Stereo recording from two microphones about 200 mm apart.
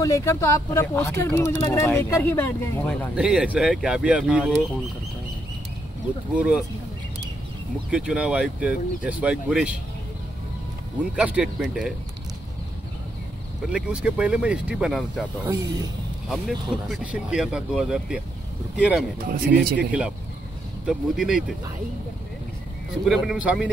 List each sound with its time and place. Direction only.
0.0 s speech: 15° left (ahead or behind)
3.2 s speech: 5° right (ahead or behind)
6.3 s speech: 5° right (ahead or behind)
7.9 s speech: 5° right (ahead or behind)
11.0 s speech: 5° right (ahead or behind)
13.7 s speech: 5° right (ahead or behind)
16.3 s speech: centre (ahead or behind)
19.1 s speech: 45° right (ahead or behind)
19.8 s speech: 5° right (ahead or behind)
23.0 s speech: 5° right (ahead or behind)